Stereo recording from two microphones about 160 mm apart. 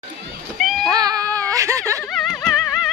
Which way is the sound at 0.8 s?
25° right (ahead or behind).